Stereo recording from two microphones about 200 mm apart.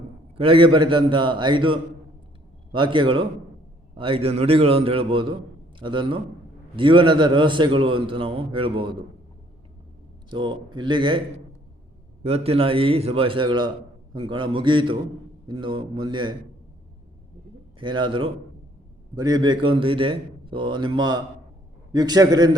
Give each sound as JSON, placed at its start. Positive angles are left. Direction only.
{"t": 0.3, "sound": "a man's voice", "side_deg": -25}
{"t": 10.2, "sound": "a man's voice", "side_deg": -25}
{"t": 12.2, "sound": "a man's voice", "side_deg": -30}
{"t": 17.7, "sound": "a man's voice", "side_deg": -25}